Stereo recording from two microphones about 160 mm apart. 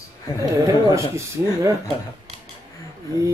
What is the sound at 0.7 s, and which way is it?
Speech, 20° right (ahead or behind).